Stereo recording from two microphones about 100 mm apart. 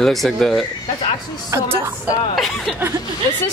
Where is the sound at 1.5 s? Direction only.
30° right (ahead or behind).